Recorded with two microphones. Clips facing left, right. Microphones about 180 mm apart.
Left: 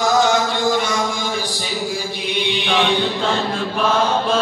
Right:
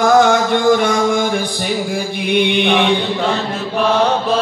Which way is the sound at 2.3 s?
55° right (ahead or behind).